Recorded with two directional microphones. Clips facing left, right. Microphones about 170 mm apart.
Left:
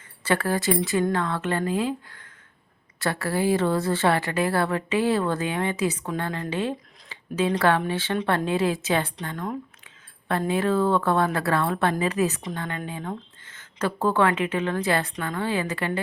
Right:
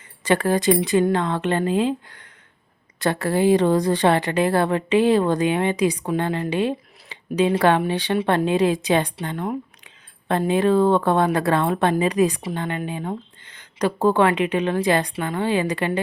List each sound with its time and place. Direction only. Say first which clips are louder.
0.3 s a woman's voice: right 5 dB; 15° right (ahead or behind)